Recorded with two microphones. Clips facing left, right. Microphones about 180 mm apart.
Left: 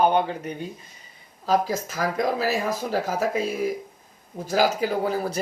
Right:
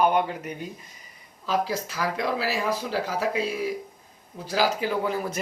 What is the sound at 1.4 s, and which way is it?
Speech, 45° left (ahead or behind).